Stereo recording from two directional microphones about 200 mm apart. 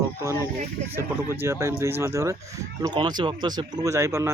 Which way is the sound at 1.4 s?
15° right (ahead or behind).